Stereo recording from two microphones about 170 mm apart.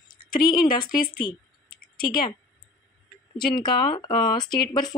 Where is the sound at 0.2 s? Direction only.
60° left (ahead or behind).